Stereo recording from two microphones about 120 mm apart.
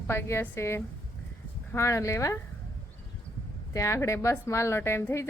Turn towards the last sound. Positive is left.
turn(degrees=20)  # may be behind; listen again after turning